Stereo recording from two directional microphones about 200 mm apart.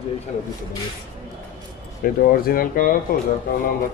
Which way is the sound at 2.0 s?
45° left (ahead or behind).